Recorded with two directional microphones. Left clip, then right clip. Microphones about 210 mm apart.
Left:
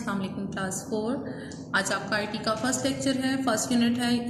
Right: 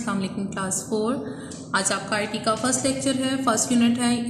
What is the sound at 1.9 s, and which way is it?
A woman's voice, 35° right (ahead or behind).